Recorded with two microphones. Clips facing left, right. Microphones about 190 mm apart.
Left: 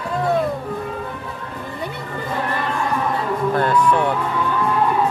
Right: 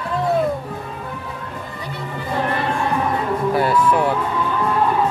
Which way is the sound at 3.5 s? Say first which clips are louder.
Even; 10° right (ahead or behind).